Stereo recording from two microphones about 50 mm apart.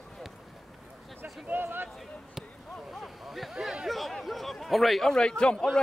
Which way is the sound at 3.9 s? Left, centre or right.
Centre.